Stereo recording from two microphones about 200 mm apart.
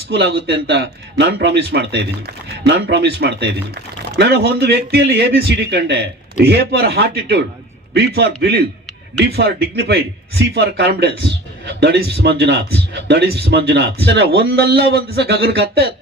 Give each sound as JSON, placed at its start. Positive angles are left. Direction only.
{"t": 0.1, "sound": "a man's voice", "side_deg": -60}